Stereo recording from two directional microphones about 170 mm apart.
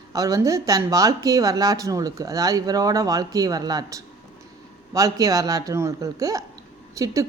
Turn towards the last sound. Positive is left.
turn(degrees=-20)  # may be behind; listen again after turning